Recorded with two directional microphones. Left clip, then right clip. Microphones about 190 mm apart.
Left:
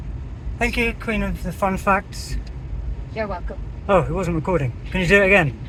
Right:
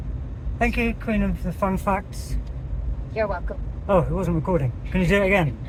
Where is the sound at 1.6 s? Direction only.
20° left (ahead or behind).